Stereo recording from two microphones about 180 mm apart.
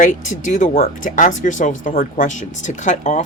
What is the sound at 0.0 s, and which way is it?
Speech, 45° left (ahead or behind).